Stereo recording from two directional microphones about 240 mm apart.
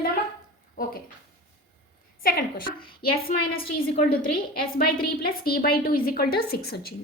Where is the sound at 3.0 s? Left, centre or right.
Left.